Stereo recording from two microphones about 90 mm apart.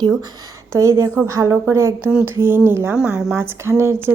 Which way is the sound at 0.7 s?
30° right (ahead or behind).